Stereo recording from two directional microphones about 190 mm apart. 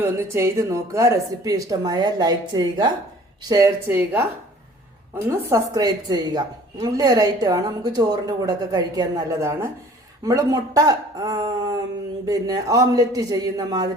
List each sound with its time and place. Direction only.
0.0 s a woman's voice: 15° right (ahead or behind)